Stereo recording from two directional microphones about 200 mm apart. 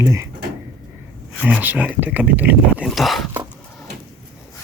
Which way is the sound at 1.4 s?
5° right (ahead or behind).